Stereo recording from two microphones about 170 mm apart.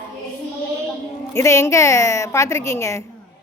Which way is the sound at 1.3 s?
15° left (ahead or behind).